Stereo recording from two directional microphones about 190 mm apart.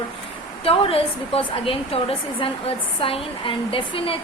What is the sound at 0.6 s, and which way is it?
A woman's voice, 30° left (ahead or behind).